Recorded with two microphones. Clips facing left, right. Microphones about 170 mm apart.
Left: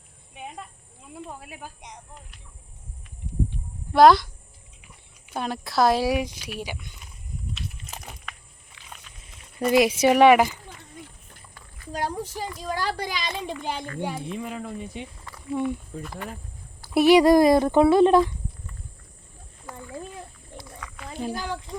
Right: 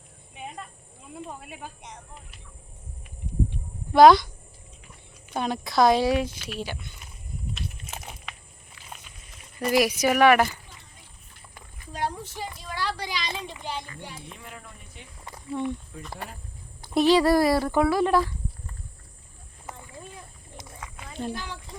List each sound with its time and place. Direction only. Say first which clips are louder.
0.3 s a sound: even; 5° left (ahead or behind)
1.1 s speech: even; 5° left (ahead or behind)
3.9 s speech: right 1 dB; centre (ahead or behind)
5.3 s speech: right 1 dB; centre (ahead or behind)
8.0 s a sound: even; 5° right (ahead or behind)
9.7 s speech: left 4 dB; 25° left (ahead or behind)
11.9 s a child's voice: left 2 dB; 40° left (ahead or behind)
14.5 s speech: left 12 dB; 90° left
15.5 s speech: left 3 dB; 10° left (ahead or behind)
16.9 s speech: left 4 dB; 10° left (ahead or behind)
20.6 s a sound: left 2 dB; 25° right (ahead or behind)
21.2 s speech: left 2 dB; centre (ahead or behind)